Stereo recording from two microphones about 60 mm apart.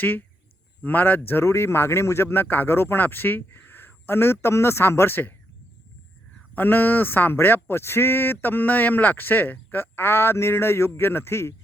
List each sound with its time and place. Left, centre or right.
0.0 s speech: left
6.5 s speech: left